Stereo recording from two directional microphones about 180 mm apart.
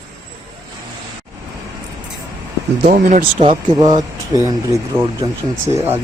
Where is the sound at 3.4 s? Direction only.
25° right (ahead or behind).